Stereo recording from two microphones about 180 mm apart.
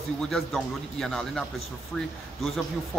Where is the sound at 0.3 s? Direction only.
Centre (ahead or behind).